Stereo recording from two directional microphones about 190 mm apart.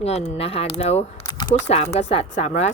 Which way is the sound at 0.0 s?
35° left (ahead or behind).